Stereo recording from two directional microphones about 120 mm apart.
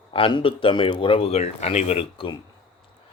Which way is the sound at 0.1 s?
45° left (ahead or behind).